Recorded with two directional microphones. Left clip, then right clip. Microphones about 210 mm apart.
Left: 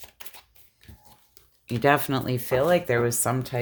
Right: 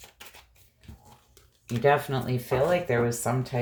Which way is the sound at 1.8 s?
45° left (ahead or behind).